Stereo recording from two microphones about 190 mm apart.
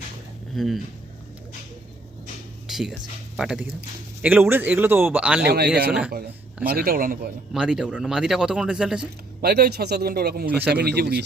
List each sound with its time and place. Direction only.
0.5 s a man's voice: centre (ahead or behind)
2.6 s a sound: centre (ahead or behind)
3.3 s a man's voice: 5° right (ahead or behind)
5.5 s a man's voice: 60° right (ahead or behind)
7.5 s a man's voice: 5° right (ahead or behind)
9.4 s a man's voice: 55° right (ahead or behind)